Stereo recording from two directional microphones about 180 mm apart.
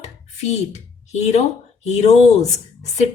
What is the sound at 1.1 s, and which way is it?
A woman's voice, 40° left (ahead or behind).